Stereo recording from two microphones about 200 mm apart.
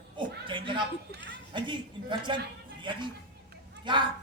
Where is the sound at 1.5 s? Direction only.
25° right (ahead or behind).